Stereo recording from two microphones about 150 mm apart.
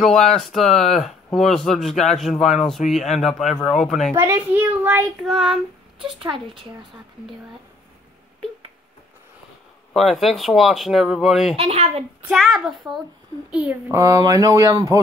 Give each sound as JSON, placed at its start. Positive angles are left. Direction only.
{"t": 0.0, "sound": "speech", "side_deg": 5}
{"t": 4.1, "sound": "a child's voice", "side_deg": -15}
{"t": 5.2, "sound": "speech", "side_deg": 0}
{"t": 5.9, "sound": "speech", "side_deg": -35}
{"t": 9.9, "sound": "speech", "side_deg": 0}
{"t": 11.5, "sound": "a child's voice", "side_deg": -40}
{"t": 12.3, "sound": "a child's voice", "side_deg": 0}
{"t": 13.9, "sound": "speech", "side_deg": -20}